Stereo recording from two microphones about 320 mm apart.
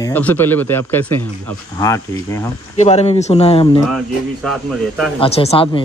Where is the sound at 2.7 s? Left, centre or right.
Centre.